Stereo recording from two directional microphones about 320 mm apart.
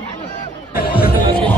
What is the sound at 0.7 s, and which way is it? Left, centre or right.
Music, left.